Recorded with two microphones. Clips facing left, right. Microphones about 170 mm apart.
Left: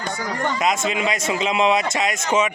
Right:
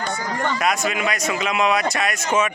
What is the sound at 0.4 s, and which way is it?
A man's voice, 20° left (ahead or behind).